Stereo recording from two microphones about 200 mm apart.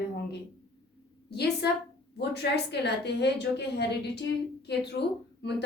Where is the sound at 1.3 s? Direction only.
55° left (ahead or behind).